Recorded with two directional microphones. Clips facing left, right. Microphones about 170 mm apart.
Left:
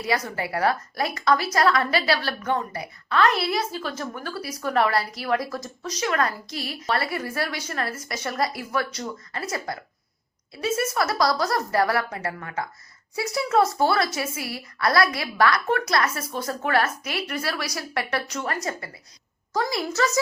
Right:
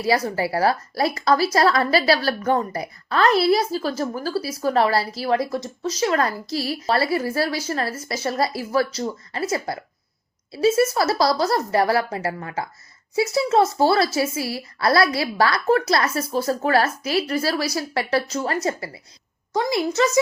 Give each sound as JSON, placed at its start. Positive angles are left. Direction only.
{"t": 0.0, "sound": "a woman's voice", "side_deg": -30}